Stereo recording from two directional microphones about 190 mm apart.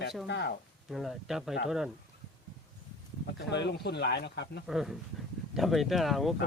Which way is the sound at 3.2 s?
65° left (ahead or behind).